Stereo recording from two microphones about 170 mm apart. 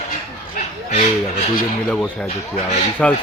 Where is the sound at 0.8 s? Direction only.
45° left (ahead or behind).